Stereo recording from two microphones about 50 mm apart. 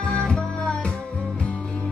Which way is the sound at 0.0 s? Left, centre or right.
Left.